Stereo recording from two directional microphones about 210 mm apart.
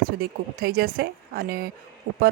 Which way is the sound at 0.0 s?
45° right (ahead or behind).